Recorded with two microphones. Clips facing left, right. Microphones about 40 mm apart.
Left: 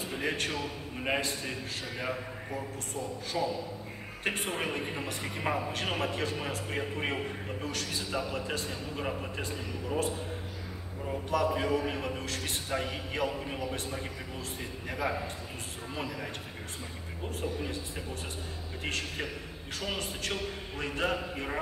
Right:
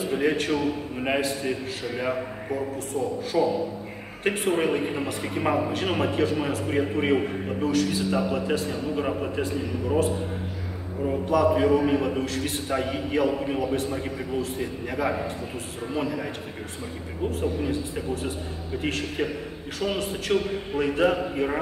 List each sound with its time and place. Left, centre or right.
0.1 s a man's voice: centre
11.2 s a man's voice: centre
18.8 s a man's voice: centre
20.3 s a man's voice: centre